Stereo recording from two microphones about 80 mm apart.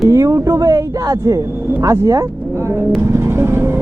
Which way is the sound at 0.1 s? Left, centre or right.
Right.